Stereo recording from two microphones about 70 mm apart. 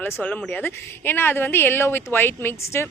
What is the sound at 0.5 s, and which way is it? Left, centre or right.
A woman's voice, left.